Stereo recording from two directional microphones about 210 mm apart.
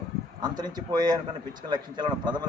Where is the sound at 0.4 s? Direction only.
20° right (ahead or behind).